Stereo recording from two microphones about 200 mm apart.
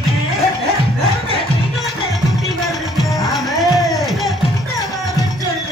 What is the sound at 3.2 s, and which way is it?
Music, centre (ahead or behind).